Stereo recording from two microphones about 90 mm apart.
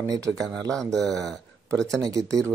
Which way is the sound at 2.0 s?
40° right (ahead or behind).